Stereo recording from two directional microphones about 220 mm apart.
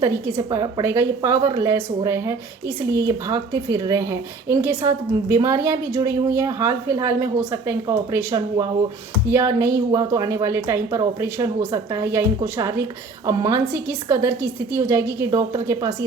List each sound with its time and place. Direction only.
0.0 s a woman's voice: 15° right (ahead or behind)